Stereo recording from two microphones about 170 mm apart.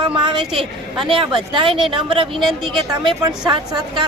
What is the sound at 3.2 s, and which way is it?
Speech, 25° right (ahead or behind).